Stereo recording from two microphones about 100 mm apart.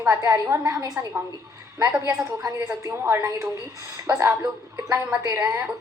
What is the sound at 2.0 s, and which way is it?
A woman's voice, 35° right (ahead or behind).